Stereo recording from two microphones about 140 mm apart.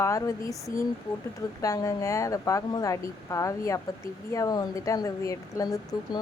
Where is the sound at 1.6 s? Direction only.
25° left (ahead or behind).